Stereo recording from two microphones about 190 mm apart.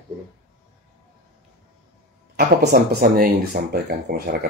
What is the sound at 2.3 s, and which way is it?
A man's voice, 55° right (ahead or behind).